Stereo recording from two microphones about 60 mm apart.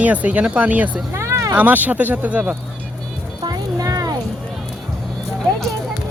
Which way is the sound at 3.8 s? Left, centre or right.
Right.